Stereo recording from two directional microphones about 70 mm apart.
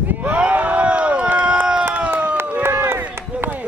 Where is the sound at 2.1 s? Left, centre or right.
Centre.